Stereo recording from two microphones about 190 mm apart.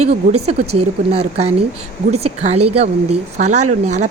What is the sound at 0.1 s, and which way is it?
Speech, 35° right (ahead or behind).